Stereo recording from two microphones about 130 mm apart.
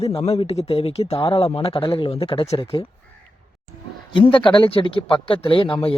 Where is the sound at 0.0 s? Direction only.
50° left (ahead or behind).